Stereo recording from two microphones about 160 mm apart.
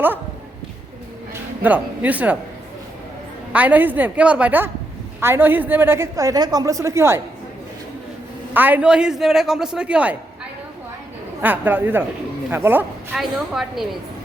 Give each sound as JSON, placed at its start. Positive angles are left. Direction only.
{"t": 1.3, "sound": "music", "side_deg": -10}
{"t": 3.5, "sound": "a woman's voice", "side_deg": -10}
{"t": 8.5, "sound": "a man's voice", "side_deg": -10}
{"t": 11.4, "sound": "a woman's voice", "side_deg": -10}
{"t": 13.1, "sound": "a man's voice", "side_deg": 0}